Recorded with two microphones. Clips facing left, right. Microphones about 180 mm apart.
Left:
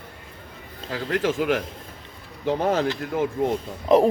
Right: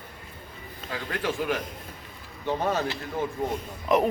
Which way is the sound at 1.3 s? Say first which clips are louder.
Left 5 dB; 90° left.